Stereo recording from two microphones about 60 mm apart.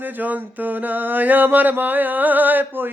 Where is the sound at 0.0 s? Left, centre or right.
Right.